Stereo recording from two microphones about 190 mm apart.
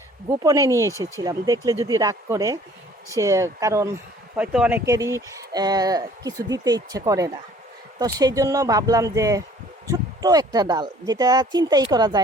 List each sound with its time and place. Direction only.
0.3 s speech: 15° right (ahead or behind)